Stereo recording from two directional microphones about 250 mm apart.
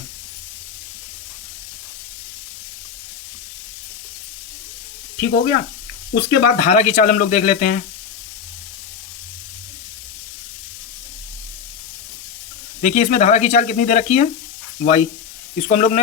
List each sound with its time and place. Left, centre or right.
5.1 s speech: left
12.8 s speech: left